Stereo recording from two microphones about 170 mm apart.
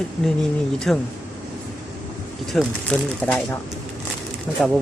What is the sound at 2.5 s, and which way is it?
Speech, 5° left (ahead or behind).